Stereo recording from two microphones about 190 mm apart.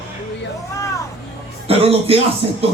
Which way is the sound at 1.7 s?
30° right (ahead or behind).